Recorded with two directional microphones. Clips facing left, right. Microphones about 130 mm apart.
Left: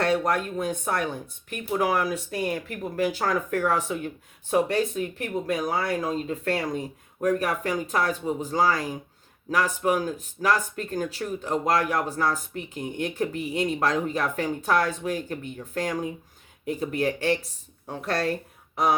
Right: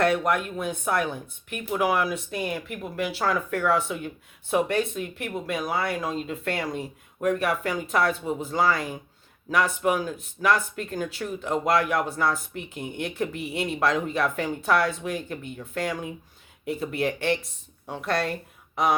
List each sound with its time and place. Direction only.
0.0 s speech: 35° left (ahead or behind)